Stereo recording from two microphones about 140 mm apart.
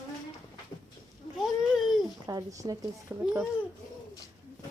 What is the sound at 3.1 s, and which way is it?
Speech, 10° right (ahead or behind).